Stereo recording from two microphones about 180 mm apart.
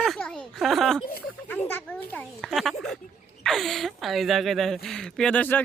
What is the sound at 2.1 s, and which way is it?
Speech, centre (ahead or behind).